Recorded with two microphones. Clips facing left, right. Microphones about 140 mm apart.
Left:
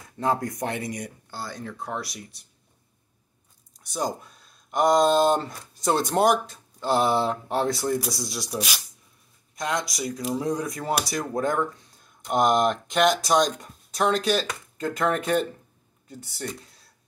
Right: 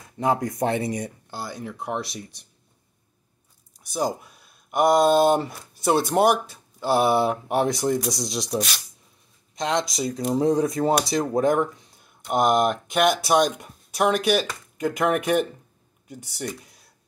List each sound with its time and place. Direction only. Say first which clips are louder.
0.2 s speech: right 3 dB; 20° right (ahead or behind)
1.3 s speech: left 1 dB; 10° right (ahead or behind)
3.7 s speech: right 3 dB; 10° right (ahead or behind)
8.5 s speech: right 3 dB; 5° left (ahead or behind)
9.6 s speech: right 4 dB; 25° right (ahead or behind)
12.3 s speech: right 1 dB; 5° right (ahead or behind)